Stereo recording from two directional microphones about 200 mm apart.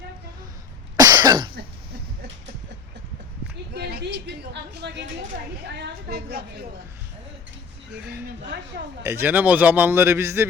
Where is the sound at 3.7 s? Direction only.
55° right (ahead or behind).